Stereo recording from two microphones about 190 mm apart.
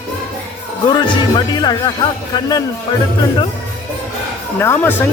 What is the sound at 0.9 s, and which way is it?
Speech, 25° left (ahead or behind).